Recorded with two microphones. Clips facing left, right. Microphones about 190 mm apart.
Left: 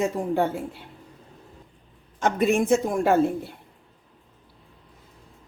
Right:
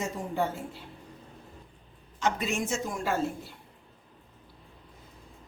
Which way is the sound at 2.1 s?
55° left (ahead or behind).